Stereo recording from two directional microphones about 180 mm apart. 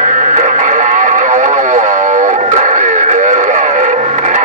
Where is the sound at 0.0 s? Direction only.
40° right (ahead or behind).